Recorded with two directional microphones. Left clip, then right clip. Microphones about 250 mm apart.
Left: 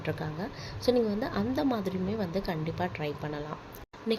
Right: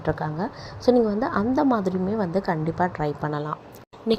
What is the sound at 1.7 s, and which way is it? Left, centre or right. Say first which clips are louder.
Speech: right 8 dB; centre.